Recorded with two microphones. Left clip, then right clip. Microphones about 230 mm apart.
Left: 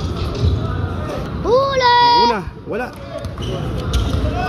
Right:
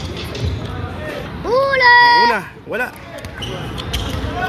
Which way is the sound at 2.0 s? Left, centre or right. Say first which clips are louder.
Right 2 dB; centre.